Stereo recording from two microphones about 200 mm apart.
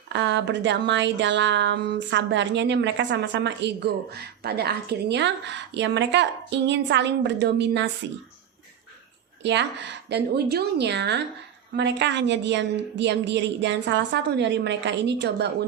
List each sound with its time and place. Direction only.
0.1 s speech: 60° right (ahead or behind)
9.4 s speech: 60° right (ahead or behind)